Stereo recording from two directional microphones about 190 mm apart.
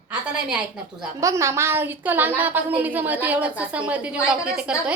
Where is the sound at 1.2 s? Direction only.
15° right (ahead or behind).